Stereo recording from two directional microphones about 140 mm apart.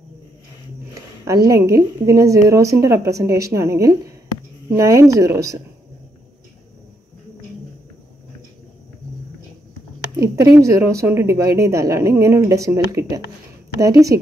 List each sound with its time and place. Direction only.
1.2 s a woman's voice: 25° right (ahead or behind)
10.1 s a woman's voice: 25° right (ahead or behind)